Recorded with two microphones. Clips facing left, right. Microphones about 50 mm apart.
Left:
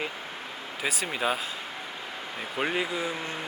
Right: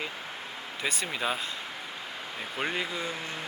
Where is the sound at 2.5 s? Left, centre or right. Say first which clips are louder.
Left 3 dB; centre.